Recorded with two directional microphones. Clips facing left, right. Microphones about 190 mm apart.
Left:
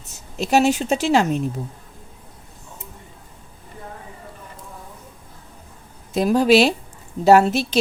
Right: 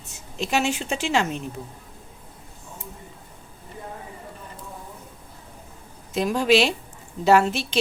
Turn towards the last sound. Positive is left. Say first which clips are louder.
# left 5 dB
turn(degrees=40)  # may be behind; listen again after turning